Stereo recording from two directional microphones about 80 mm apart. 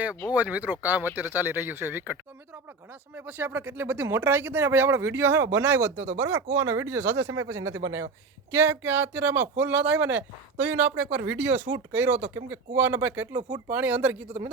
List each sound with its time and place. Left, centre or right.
0.3 s speech: centre
3.2 s speech: right